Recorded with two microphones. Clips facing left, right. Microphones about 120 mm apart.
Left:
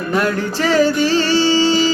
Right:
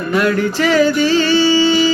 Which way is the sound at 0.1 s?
35° left (ahead or behind).